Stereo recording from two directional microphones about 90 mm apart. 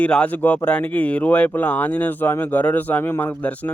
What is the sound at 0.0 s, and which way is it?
A man's voice, 15° left (ahead or behind).